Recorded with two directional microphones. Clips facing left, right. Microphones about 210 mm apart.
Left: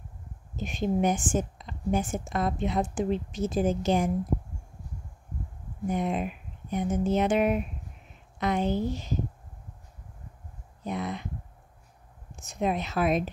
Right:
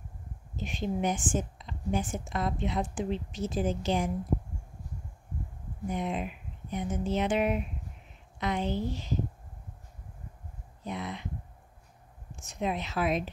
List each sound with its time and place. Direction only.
0.6 s a woman's voice: 45° left (ahead or behind)
5.9 s a woman's voice: 45° left (ahead or behind)
10.8 s a sound: 45° left (ahead or behind)
12.4 s a woman's voice: 45° left (ahead or behind)